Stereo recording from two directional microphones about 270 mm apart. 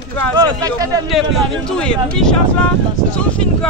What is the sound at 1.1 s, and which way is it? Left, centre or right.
A man's voice, centre.